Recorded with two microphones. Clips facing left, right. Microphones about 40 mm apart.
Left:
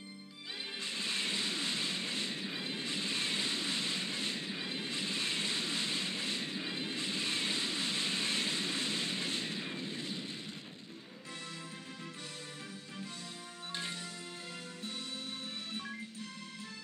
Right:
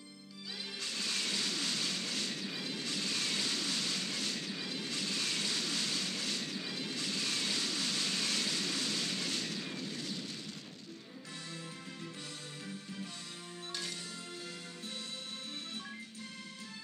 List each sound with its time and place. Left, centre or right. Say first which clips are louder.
0.7 s music: left 1 dB; left